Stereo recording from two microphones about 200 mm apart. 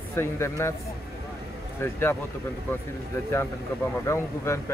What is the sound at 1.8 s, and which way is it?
Speech, 10° left (ahead or behind).